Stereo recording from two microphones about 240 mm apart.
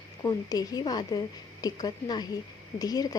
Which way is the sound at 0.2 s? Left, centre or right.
Centre.